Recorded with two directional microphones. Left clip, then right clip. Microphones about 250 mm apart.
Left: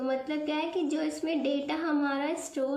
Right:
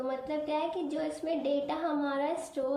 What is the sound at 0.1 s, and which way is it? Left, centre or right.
A woman's voice, centre.